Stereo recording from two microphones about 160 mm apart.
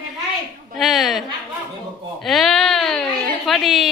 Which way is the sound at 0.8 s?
Centre (ahead or behind).